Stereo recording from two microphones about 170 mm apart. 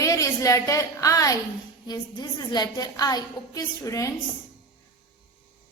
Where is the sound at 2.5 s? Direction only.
25° left (ahead or behind).